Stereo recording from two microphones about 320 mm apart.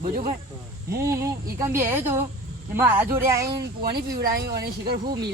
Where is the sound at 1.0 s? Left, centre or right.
Centre.